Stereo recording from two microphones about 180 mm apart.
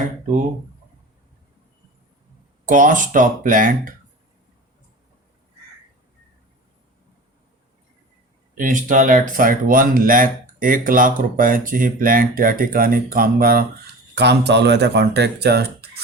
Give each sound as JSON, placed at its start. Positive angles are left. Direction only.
{"t": 2.6, "sound": "speech", "side_deg": -45}
{"t": 8.5, "sound": "speech", "side_deg": -45}
{"t": 14.2, "sound": "speech", "side_deg": -70}